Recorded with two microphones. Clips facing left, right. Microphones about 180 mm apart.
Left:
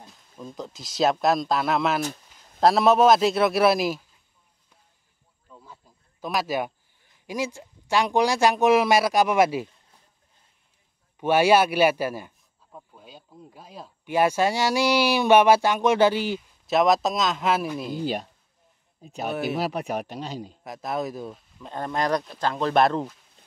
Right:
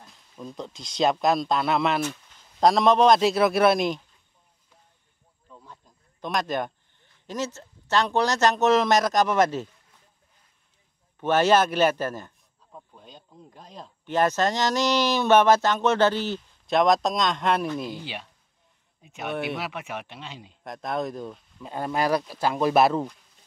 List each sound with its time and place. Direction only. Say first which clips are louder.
0.1 s speech: right 2 dB; centre (ahead or behind)
5.5 s speech: even; 5° left (ahead or behind)
11.1 s a man's voice: left 1 dB; 10° left (ahead or behind)
17.9 s speech: left 9 dB; 40° left (ahead or behind)
20.6 s speech: right 1 dB; 5° left (ahead or behind)